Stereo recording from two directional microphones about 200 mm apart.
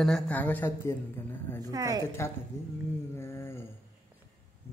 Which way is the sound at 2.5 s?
15° left (ahead or behind).